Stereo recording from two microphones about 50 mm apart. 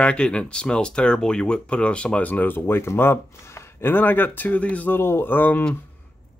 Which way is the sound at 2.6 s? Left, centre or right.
Left.